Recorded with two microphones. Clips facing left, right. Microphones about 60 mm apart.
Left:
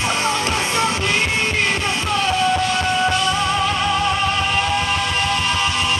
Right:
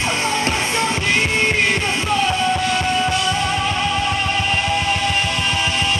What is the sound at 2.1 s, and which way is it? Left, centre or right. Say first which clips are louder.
Music: left 1 dB; centre.